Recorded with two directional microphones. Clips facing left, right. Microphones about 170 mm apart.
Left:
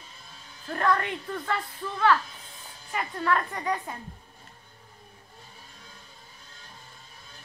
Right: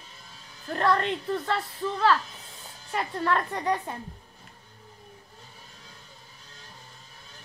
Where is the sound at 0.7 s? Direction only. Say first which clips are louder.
Right 2 dB; 25° right (ahead or behind).